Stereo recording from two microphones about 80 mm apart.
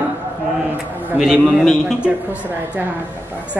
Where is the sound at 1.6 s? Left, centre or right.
Centre.